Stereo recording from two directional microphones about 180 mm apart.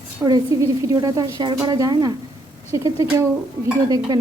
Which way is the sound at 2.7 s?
15° right (ahead or behind).